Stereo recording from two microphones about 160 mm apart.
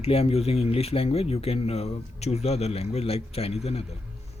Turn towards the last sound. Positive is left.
turn(degrees=40)  # may be behind; listen again after turning